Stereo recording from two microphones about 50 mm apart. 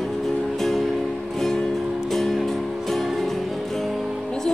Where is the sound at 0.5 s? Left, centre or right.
Centre.